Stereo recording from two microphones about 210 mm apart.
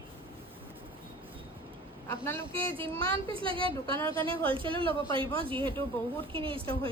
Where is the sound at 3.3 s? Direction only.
25° right (ahead or behind).